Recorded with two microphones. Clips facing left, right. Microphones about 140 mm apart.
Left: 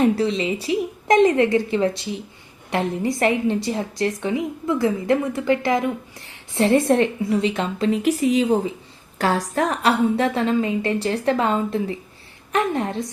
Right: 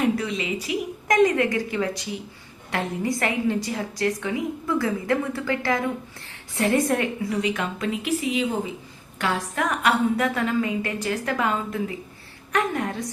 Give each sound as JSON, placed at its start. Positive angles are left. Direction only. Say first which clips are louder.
{"t": 0.0, "sound": "a woman's voice", "louder": "left 5 dB", "side_deg": 30}
{"t": 8.0, "sound": "a woman's voice", "louder": "left 5 dB", "side_deg": 40}